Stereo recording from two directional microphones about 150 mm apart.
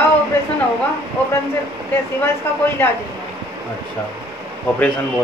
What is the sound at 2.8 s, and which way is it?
Speech, 15° left (ahead or behind).